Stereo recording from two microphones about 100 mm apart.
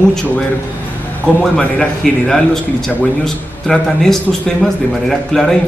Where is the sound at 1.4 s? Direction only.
5° left (ahead or behind).